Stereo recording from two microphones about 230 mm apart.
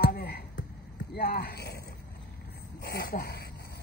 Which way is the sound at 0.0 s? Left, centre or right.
Left.